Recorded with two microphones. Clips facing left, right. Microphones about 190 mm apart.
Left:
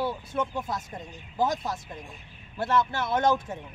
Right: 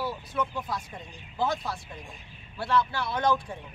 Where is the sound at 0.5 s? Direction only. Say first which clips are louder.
Left 2 dB; 45° left (ahead or behind).